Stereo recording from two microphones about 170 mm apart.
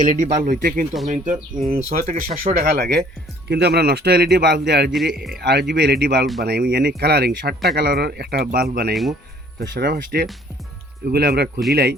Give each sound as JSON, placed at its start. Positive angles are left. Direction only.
{"t": 0.0, "sound": "speech", "side_deg": -45}